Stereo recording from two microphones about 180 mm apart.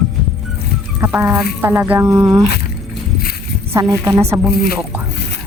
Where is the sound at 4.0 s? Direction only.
15° right (ahead or behind).